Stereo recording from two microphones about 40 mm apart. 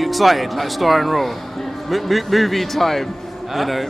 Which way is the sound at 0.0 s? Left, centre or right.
Centre.